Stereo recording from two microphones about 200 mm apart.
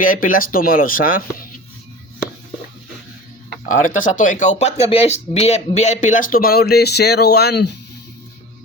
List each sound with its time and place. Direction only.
0.0 s speech: 45° left (ahead or behind)
3.7 s speech: 40° left (ahead or behind); by 7.7 s 55° left (ahead or behind)